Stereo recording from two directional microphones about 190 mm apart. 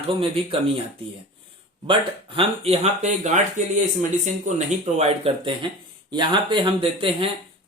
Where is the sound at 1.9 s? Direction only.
25° right (ahead or behind).